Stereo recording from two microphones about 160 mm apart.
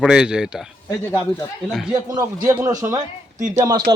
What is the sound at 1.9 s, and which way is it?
A man's voice, 20° right (ahead or behind).